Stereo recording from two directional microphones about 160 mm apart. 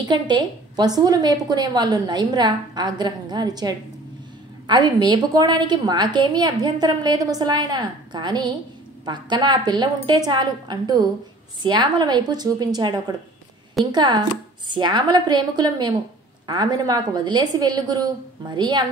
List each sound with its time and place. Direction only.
0.0 s a woman's voice: 25° right (ahead or behind)